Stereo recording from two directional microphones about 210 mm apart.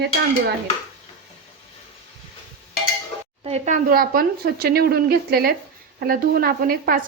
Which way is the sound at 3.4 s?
30° right (ahead or behind).